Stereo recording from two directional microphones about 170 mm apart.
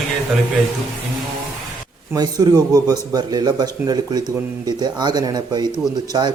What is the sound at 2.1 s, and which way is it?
Speech, 25° right (ahead or behind).